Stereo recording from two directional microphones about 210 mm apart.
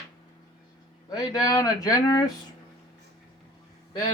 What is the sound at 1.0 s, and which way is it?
Speech, 20° left (ahead or behind).